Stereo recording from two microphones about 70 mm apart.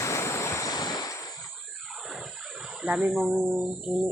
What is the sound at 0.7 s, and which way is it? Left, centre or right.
Waves, left.